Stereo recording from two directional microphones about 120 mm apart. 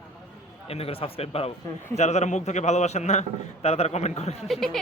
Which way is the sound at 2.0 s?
70° left (ahead or behind).